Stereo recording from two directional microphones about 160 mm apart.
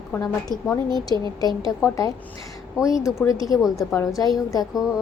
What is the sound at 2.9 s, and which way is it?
Speech, 5° right (ahead or behind).